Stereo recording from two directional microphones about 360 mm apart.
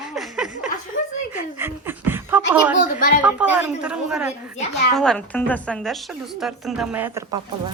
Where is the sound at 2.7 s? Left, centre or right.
Left.